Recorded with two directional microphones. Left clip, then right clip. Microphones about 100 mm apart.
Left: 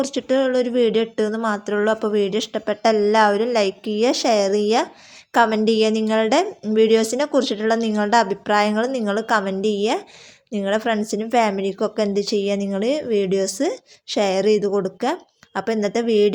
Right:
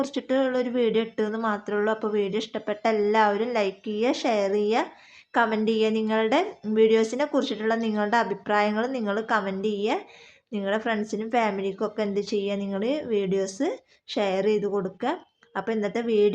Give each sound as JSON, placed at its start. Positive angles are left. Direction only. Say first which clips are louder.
{"t": 0.0, "sound": "a woman's voice", "louder": "left 5 dB", "side_deg": 15}